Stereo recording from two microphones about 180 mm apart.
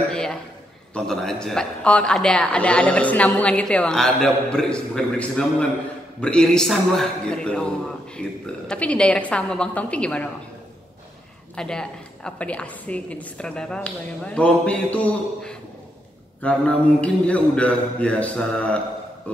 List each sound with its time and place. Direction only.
0.1 s a woman's voice: 5° left (ahead or behind)
11.5 s a woman's voice: 5° left (ahead or behind)
16.3 s a woman's voice: 10° left (ahead or behind)
19.3 s a sound: 5° left (ahead or behind)